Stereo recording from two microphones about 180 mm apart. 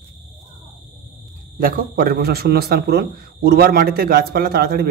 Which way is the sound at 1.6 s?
55° right (ahead or behind).